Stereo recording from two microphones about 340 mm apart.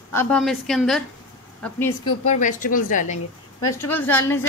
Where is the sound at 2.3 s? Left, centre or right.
Left.